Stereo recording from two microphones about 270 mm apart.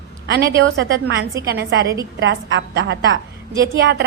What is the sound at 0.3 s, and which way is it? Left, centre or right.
A woman's voice, right.